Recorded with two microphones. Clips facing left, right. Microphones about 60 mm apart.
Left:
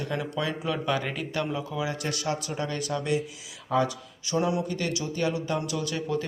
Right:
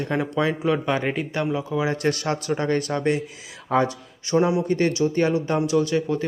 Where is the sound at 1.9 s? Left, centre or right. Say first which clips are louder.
Right 7 dB; right.